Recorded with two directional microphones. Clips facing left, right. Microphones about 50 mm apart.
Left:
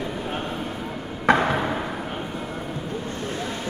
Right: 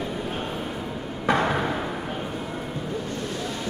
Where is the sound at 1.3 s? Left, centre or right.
Left.